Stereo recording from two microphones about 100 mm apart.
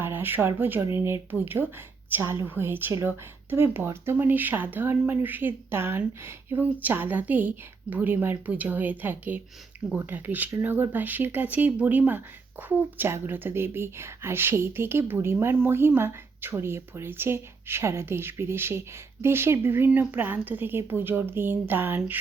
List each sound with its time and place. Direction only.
0.0 s a woman's voice: 20° right (ahead or behind)